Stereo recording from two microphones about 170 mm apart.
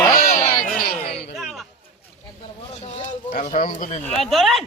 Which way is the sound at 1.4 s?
Centre (ahead or behind).